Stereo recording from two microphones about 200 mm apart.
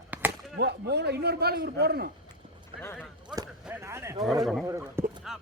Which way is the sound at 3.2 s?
20° right (ahead or behind).